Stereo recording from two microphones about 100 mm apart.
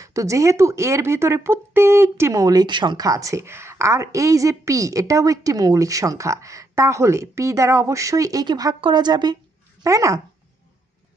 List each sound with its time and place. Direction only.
0.0 s a woman's voice: 30° right (ahead or behind)
9.8 s speech: 35° right (ahead or behind)